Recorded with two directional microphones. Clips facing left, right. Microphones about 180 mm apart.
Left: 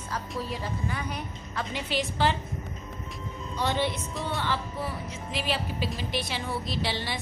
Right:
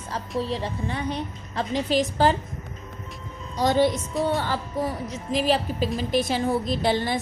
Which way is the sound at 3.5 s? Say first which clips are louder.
Right 8 dB; 40° right (ahead or behind).